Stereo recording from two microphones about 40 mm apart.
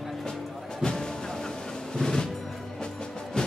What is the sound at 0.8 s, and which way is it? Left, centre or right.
Music, centre.